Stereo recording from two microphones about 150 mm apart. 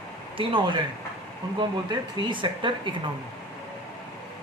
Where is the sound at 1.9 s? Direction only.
35° right (ahead or behind).